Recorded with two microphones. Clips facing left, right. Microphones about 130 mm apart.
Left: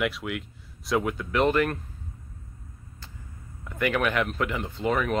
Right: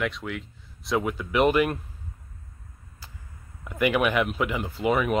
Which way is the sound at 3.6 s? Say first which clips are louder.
Right 3 dB; 10° right (ahead or behind).